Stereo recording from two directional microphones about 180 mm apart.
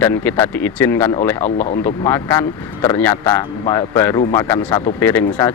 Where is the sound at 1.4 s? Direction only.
40° left (ahead or behind).